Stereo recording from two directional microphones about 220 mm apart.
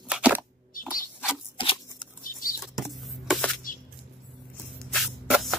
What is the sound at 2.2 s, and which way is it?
Bird flight, 40° left (ahead or behind).